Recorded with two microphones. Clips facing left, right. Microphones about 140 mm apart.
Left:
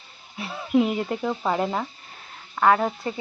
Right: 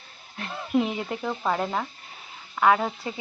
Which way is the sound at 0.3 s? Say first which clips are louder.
Left 3 dB; 5° left (ahead or behind).